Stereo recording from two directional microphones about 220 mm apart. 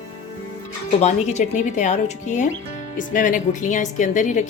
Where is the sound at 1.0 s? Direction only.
30° left (ahead or behind).